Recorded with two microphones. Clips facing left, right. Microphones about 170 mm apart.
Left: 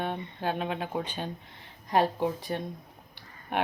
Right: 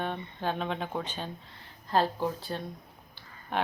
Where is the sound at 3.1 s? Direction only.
15° left (ahead or behind).